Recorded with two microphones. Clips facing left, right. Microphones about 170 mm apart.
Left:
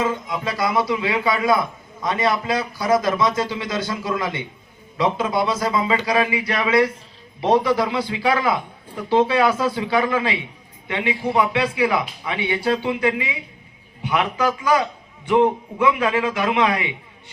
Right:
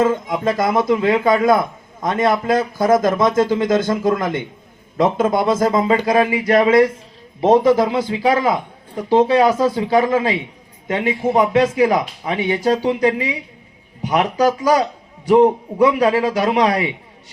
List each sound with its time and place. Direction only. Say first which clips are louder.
0.0 s a woman's voice: right 6 dB; 50° right (ahead or behind)